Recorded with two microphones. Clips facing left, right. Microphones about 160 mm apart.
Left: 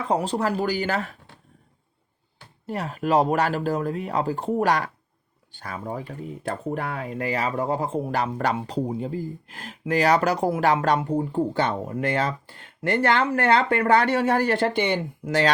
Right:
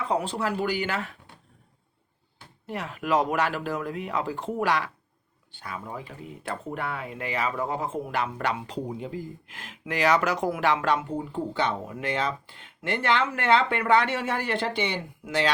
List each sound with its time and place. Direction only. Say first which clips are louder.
0.1 s speech: left 5 dB; 40° left (ahead or behind)
2.6 s speech: left 3 dB; 35° left (ahead or behind)